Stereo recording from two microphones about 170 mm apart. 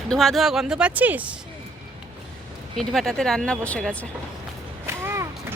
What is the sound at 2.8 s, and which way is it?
Speech, centre (ahead or behind).